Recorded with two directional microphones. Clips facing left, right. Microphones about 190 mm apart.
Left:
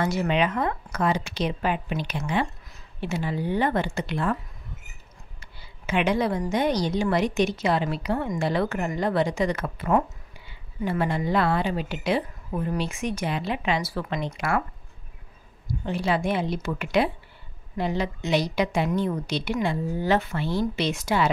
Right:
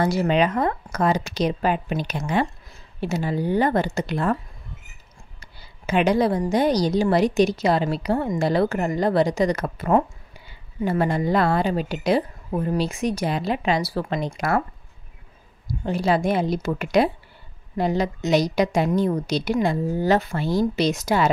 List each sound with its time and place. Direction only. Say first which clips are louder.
0.0 s a woman's voice: right 4 dB; 35° right (ahead or behind)
5.4 s a woman's voice: right 1 dB; 40° right (ahead or behind)
15.8 s a woman's voice: right 4 dB; 40° right (ahead or behind)